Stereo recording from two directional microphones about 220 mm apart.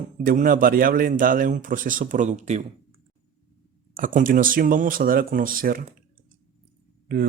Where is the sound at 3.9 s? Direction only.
40° right (ahead or behind).